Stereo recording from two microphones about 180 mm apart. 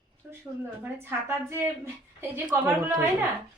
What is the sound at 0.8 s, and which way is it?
A woman's voice, 15° right (ahead or behind).